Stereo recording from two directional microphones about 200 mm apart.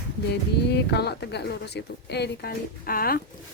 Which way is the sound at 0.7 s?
55° left (ahead or behind).